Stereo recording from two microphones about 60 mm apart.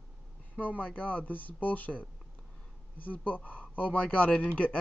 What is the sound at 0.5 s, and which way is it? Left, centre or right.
Speech, left.